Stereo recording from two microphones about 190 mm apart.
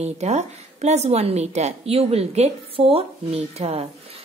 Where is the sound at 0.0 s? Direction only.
35° right (ahead or behind).